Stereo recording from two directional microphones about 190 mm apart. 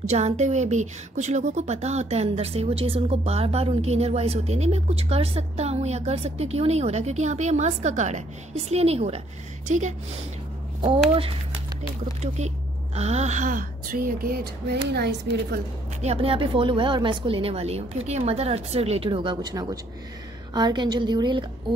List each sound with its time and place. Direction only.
0.1 s a woman's voice: 35° right (ahead or behind)
11.1 s a woman's voice: 30° right (ahead or behind); by 15.6 s 60° right (ahead or behind)
16.0 s speech: 30° right (ahead or behind)